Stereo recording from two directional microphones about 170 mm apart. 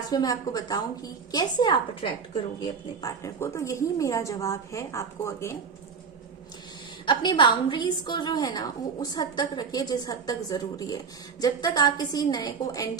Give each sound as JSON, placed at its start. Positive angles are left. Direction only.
{"t": 0.1, "sound": "a woman's voice", "side_deg": 20}
{"t": 7.0, "sound": "a woman's voice", "side_deg": 25}